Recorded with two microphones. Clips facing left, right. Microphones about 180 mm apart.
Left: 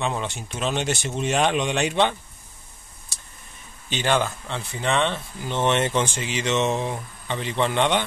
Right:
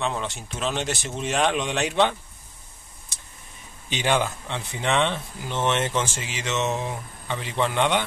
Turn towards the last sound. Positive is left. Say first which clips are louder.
# left 1 dB
turn(degrees=-5)  # may be behind; listen again after turning